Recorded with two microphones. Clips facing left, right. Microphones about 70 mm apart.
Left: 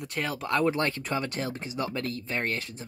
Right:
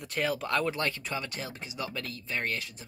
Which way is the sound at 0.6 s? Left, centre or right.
Left.